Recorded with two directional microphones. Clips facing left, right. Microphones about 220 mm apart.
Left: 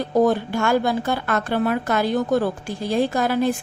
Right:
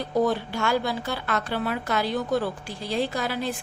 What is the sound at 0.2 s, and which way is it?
A woman's voice, 50° left (ahead or behind).